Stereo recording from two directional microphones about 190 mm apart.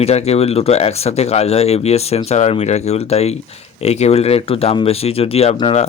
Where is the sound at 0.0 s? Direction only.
35° left (ahead or behind).